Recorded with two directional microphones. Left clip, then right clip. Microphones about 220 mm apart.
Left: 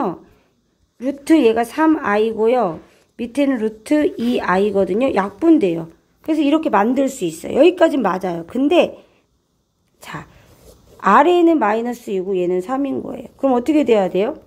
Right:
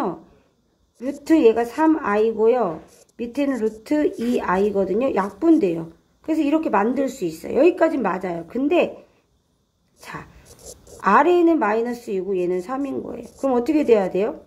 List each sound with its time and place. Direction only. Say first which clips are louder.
0.9 s a woman's voice: left 4 dB; 35° left (ahead or behind)
9.9 s speech: left 3 dB; 40° left (ahead or behind)